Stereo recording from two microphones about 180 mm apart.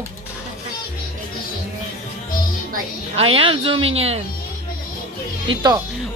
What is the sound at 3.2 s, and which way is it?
A woman's voice, 30° right (ahead or behind).